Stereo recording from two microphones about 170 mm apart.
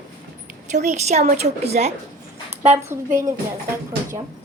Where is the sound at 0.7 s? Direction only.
40° right (ahead or behind).